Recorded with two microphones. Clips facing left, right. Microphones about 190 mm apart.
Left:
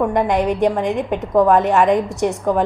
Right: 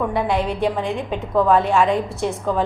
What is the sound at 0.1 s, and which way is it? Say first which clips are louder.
A woman's voice: left 4 dB; 15° left (ahead or behind).